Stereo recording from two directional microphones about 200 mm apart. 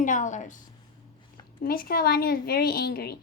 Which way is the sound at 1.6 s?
50° left (ahead or behind).